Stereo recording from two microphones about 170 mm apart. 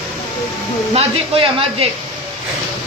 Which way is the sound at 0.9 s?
35° right (ahead or behind).